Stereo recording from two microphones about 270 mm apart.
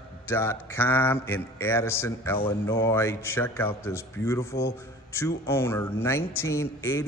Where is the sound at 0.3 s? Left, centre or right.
Centre.